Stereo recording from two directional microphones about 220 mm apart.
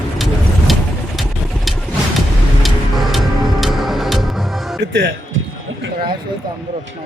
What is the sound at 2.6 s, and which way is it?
Music, centre (ahead or behind).